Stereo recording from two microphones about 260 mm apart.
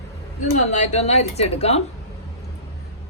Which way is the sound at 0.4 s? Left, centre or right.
Left.